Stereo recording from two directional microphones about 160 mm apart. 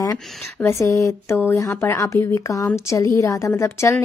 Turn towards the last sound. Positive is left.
turn(degrees=15)  # may be behind; listen again after turning